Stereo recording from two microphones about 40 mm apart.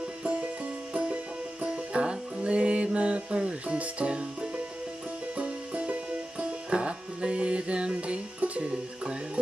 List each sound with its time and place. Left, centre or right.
0.2 s music: right
3.7 s speech: right
4.1 s music: right
5.3 s music: right